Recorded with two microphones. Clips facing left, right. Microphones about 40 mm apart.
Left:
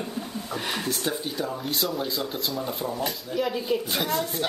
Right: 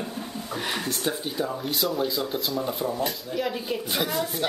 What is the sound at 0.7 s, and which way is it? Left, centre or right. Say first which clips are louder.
Speech: even; centre.